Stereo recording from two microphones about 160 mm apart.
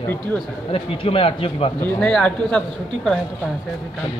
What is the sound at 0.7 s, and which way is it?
A man's voice, 35° left (ahead or behind).